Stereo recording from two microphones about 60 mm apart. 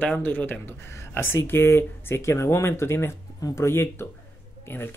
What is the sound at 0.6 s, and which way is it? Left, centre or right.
Speech, left.